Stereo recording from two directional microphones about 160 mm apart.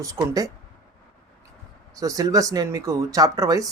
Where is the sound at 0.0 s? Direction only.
20° right (ahead or behind).